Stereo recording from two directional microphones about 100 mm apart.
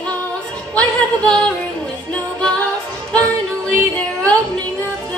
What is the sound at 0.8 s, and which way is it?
Music, 10° left (ahead or behind).